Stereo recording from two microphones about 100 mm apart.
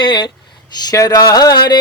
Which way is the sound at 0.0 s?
50° left (ahead or behind).